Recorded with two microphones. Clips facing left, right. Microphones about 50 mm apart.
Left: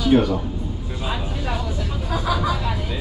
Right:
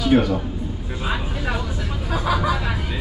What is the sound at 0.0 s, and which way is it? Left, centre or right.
Speech, centre.